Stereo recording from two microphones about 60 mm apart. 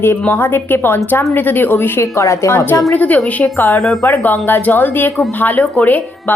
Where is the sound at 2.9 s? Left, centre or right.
Left.